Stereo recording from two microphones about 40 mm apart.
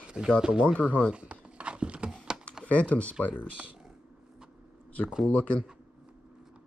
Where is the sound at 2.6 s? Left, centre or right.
Left.